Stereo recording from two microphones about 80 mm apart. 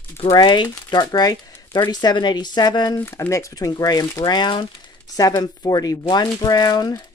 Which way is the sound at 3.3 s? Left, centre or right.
Left.